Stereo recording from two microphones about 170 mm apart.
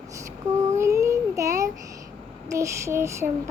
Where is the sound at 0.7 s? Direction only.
15° right (ahead or behind).